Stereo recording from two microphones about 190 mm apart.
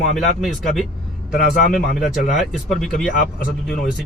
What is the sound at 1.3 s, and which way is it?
Speech, 45° left (ahead or behind).